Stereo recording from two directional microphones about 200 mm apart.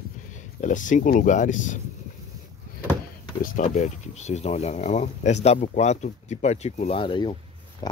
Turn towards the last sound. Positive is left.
turn(degrees=20)  # may be behind; listen again after turning